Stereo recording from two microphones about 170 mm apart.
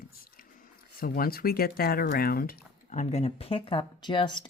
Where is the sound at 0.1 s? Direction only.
60° left (ahead or behind).